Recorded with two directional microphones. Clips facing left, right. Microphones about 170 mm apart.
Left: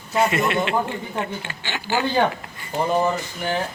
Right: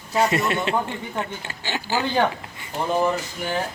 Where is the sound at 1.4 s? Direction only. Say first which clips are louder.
Right 1 dB; 40° right (ahead or behind).